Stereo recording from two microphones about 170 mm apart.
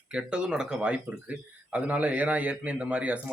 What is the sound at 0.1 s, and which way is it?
Speech, 5° right (ahead or behind).